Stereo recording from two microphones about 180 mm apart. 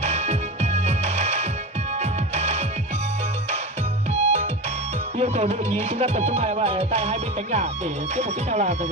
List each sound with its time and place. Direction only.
0.0 s music: 35° right (ahead or behind)
4.1 s music: 35° right (ahead or behind)